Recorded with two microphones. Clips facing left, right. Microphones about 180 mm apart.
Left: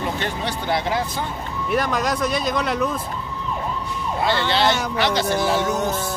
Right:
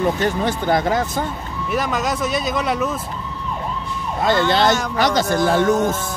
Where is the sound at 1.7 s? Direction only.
Centre (ahead or behind).